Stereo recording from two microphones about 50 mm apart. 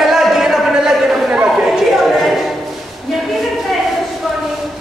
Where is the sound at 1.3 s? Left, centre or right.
Centre.